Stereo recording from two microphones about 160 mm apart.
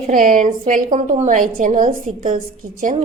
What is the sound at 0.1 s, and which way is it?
A woman's voice, 55° right (ahead or behind).